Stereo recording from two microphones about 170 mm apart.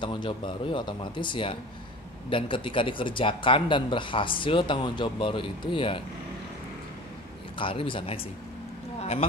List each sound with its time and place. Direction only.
0.0 s speech: 30° left (ahead or behind)
7.5 s speech: 30° left (ahead or behind)